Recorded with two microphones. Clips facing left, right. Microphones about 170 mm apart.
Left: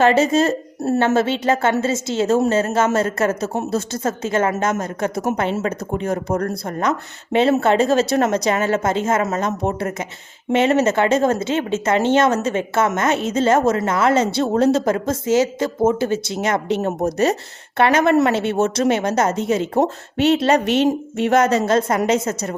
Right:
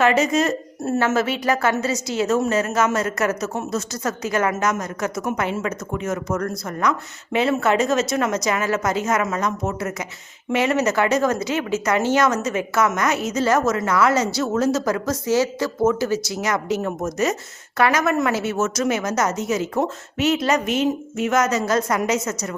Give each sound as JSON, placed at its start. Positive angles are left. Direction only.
{"t": 0.0, "sound": "speech", "side_deg": 30}
{"t": 20.7, "sound": "a woman's voice", "side_deg": 75}
{"t": 21.2, "sound": "speech", "side_deg": 30}